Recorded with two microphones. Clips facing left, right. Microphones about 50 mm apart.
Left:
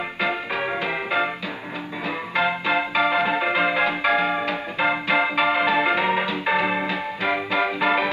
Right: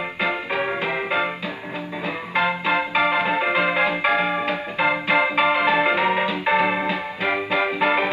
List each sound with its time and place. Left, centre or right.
0.2 s music: right
2.3 s music: right